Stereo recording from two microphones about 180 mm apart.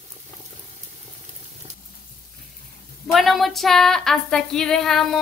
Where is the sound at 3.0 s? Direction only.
Centre (ahead or behind).